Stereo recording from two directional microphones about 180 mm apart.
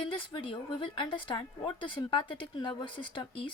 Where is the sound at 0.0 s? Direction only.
30° left (ahead or behind).